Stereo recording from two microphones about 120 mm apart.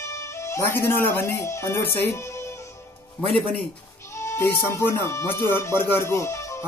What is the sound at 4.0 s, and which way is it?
Speech, 25° left (ahead or behind).